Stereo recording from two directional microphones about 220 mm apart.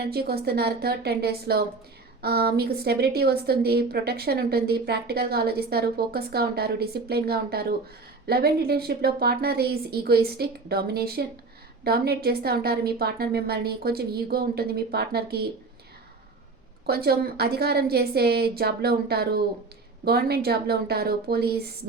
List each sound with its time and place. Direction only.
0.0 s a woman's voice: 45° right (ahead or behind)
16.8 s a woman's voice: 45° right (ahead or behind)